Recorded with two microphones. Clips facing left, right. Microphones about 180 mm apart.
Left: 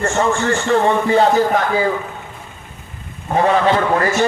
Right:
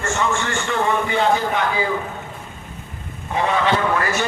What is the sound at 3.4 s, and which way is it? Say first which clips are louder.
Speech: left 5 dB; 40° left (ahead or behind).